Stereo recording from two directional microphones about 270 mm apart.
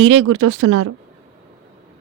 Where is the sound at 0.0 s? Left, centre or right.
Right.